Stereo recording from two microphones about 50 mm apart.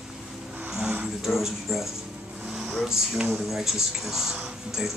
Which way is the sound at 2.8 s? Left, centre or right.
Centre.